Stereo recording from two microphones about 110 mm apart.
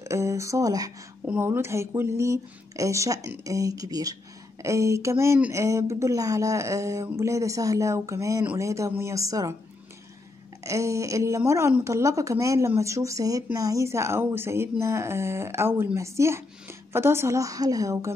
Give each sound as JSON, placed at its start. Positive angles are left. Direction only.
{"t": 0.0, "sound": "speech", "side_deg": -25}
{"t": 1.2, "sound": "speech", "side_deg": -20}
{"t": 10.6, "sound": "speech", "side_deg": -30}